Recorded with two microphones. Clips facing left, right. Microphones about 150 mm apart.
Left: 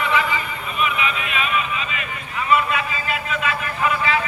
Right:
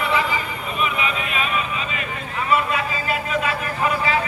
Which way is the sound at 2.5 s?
40° right (ahead or behind).